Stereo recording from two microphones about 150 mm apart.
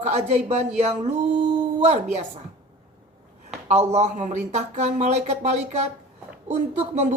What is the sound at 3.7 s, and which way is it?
A man's voice, 45° right (ahead or behind).